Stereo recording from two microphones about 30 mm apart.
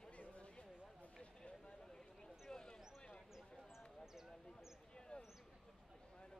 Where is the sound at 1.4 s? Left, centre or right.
Left.